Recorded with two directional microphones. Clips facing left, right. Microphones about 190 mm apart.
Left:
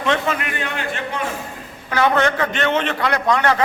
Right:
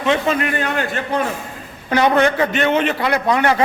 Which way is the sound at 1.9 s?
20° right (ahead or behind).